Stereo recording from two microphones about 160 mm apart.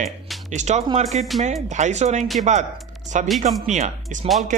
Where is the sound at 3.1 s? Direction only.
50° right (ahead or behind).